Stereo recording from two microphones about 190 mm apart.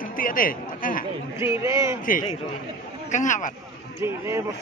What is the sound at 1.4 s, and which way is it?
Speech, 15° right (ahead or behind).